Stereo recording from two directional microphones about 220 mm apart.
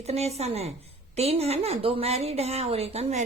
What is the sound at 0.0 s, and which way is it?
A woman's voice, 30° right (ahead or behind).